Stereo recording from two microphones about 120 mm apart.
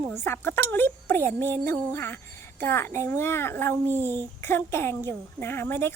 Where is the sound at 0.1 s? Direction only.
20° left (ahead or behind).